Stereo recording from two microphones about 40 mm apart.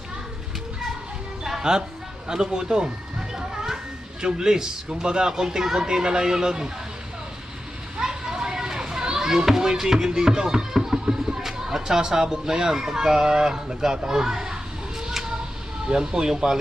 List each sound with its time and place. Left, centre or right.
1.5 s music: centre
2.2 s children playing: centre
4.2 s speech: centre
7.9 s speech: centre
15.0 s a sound: centre
15.9 s speech: centre